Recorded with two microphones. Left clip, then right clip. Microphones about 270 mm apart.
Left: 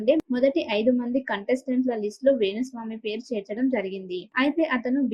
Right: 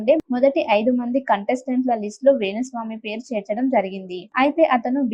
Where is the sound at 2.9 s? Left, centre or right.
Centre.